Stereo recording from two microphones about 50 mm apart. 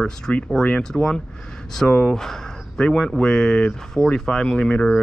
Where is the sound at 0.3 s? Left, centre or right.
Left.